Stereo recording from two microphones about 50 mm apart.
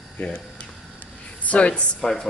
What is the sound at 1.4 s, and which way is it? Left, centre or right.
Speech, left.